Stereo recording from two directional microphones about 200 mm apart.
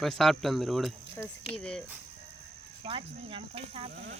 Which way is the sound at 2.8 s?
25° right (ahead or behind).